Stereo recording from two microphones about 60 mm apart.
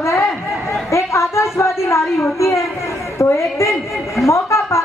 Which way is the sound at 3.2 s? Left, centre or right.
Left.